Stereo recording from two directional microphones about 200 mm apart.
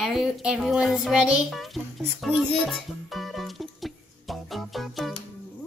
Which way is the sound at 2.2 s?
Centre (ahead or behind).